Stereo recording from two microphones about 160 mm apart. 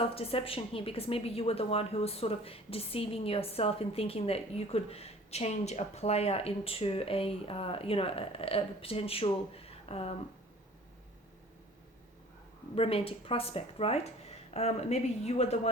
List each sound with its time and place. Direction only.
0.0 s a woman's voice: 35° left (ahead or behind)
12.7 s a woman's voice: 35° left (ahead or behind)